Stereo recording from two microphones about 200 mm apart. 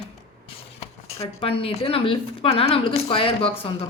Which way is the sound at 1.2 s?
30° left (ahead or behind).